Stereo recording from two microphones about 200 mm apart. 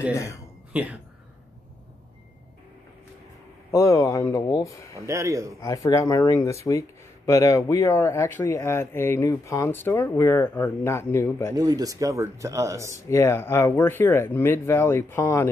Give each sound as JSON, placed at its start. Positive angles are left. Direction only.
{"t": 0.1, "sound": "speech", "side_deg": 15}
{"t": 3.7, "sound": "speech", "side_deg": 15}
{"t": 5.0, "sound": "speech", "side_deg": -15}
{"t": 5.6, "sound": "speech", "side_deg": 15}
{"t": 11.5, "sound": "speech", "side_deg": -20}
{"t": 13.1, "sound": "speech", "side_deg": 15}